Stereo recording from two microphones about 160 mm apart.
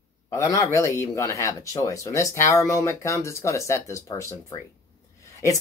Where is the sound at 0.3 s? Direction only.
20° left (ahead or behind).